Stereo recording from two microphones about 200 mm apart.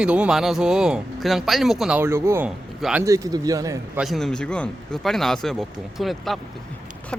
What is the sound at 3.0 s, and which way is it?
Speech, 15° right (ahead or behind).